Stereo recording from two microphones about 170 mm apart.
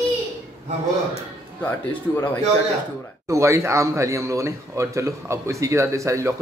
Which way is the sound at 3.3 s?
15° right (ahead or behind).